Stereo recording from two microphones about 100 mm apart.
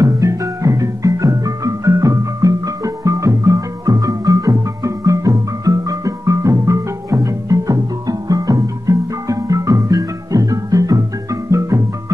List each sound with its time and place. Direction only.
0.0 s music: 35° right (ahead or behind)